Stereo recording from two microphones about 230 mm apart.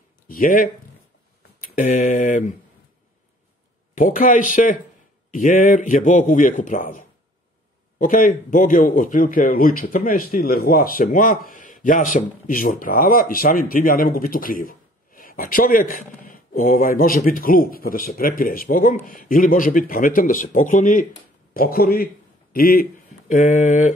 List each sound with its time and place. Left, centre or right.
0.3 s speech: left
3.9 s a man's voice: left